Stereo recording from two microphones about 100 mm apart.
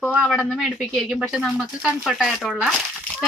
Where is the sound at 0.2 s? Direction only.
Centre (ahead or behind).